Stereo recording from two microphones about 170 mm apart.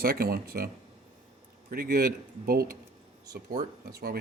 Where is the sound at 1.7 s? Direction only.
55° right (ahead or behind).